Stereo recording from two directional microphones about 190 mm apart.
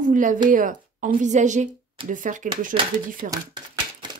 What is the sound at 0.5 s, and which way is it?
A woman's voice, 45° right (ahead or behind).